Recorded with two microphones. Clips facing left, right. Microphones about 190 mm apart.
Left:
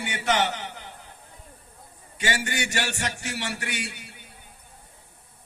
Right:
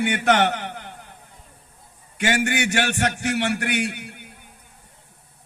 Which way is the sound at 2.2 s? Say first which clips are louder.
Right 7 dB; 60° right (ahead or behind).